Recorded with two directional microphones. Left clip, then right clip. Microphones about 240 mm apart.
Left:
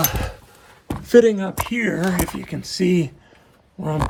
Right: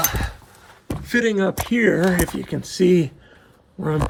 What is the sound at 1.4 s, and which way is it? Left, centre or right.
Speech, centre.